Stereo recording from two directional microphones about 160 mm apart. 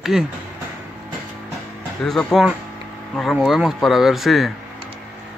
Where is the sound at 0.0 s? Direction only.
Centre (ahead or behind).